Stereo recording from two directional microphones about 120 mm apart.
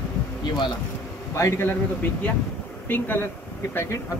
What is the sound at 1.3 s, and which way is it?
Speech, 20° left (ahead or behind).